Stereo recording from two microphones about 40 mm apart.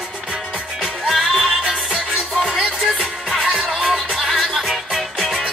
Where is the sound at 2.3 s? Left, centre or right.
Centre.